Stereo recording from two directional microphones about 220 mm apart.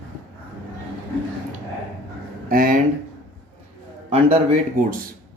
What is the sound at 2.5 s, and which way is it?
Speech, 40° right (ahead or behind).